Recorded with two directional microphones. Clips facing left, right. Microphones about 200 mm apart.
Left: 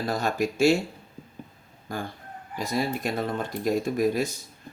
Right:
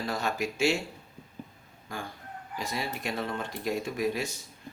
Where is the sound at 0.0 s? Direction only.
40° left (ahead or behind).